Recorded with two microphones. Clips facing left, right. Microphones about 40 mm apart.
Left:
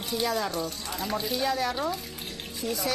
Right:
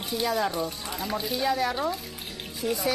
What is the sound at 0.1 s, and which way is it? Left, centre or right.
A woman's voice, centre.